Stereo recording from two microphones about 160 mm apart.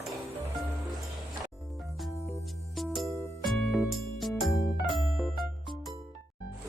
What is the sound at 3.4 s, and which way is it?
Music, centre (ahead or behind).